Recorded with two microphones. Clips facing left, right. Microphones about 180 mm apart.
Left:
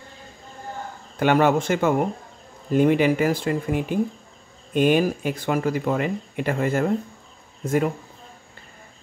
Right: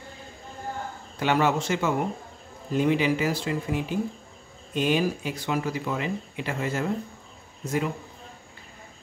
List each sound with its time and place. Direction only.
1.2 s speech: 55° left (ahead or behind)